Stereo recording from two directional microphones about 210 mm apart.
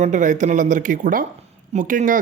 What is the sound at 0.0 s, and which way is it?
Speech, 35° right (ahead or behind).